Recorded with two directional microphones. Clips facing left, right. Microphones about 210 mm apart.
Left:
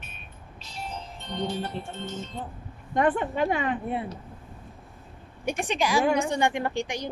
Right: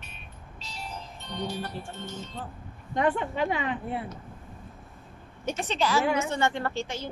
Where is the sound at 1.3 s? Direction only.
20° left (ahead or behind).